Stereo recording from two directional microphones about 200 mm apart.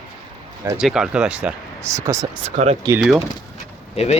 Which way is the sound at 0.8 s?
5° right (ahead or behind).